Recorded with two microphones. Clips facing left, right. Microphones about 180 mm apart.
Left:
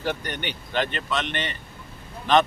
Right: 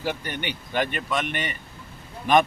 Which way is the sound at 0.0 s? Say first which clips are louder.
Even; 10° right (ahead or behind).